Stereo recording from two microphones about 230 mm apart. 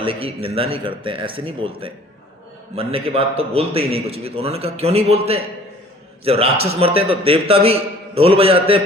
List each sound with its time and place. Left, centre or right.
0.0 s a man's voice: right
2.7 s a man's voice: right